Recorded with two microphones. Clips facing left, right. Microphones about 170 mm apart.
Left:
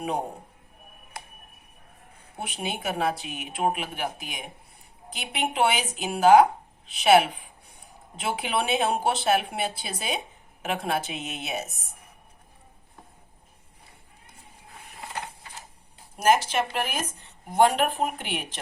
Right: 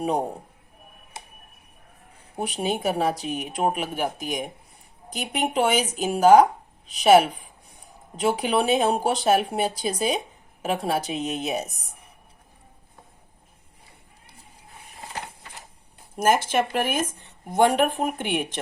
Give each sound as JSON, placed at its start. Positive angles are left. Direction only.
{"t": 2.3, "sound": "speech", "side_deg": -40}
{"t": 16.1, "sound": "speech", "side_deg": -50}